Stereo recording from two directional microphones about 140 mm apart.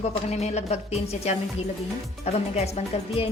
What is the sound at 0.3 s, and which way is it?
A woman's voice, 50° left (ahead or behind).